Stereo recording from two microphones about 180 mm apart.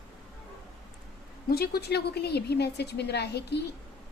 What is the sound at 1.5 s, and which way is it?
A woman's voice, 60° left (ahead or behind).